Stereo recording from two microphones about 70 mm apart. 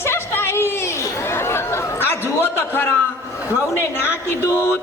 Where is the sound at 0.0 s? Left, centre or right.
Left.